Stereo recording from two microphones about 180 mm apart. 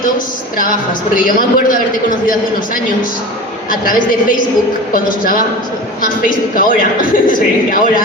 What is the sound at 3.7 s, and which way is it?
A man's voice, 50° left (ahead or behind).